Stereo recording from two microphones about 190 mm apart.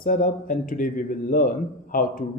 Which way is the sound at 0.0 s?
45° left (ahead or behind).